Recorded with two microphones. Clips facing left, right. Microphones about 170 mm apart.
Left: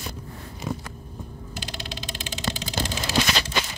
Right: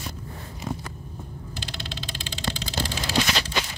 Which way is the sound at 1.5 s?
15° left (ahead or behind).